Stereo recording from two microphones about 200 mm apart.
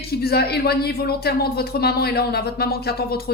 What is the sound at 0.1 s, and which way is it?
Speech, 50° left (ahead or behind).